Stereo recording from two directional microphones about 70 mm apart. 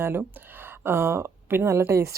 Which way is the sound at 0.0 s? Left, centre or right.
Right.